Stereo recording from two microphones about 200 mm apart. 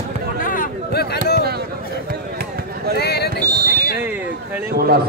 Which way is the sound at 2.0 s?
50° right (ahead or behind).